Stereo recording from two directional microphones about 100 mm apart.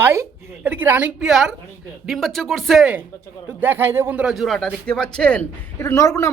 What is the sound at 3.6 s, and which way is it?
Speech, 20° right (ahead or behind).